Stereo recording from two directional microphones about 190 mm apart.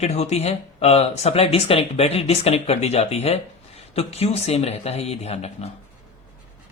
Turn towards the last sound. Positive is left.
turn(degrees=35)  # may be behind; listen again after turning